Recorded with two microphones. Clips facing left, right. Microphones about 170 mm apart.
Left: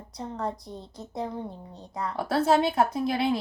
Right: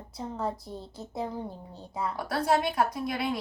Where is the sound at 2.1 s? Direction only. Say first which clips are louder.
Left 5 dB; 25° left (ahead or behind).